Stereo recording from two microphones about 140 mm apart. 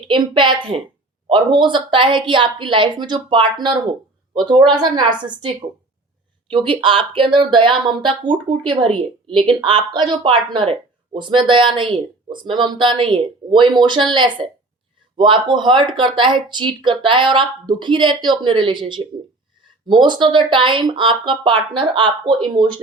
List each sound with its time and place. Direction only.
0.1 s speech: 35° right (ahead or behind)
6.5 s speech: 35° right (ahead or behind)
19.9 s speech: 35° right (ahead or behind)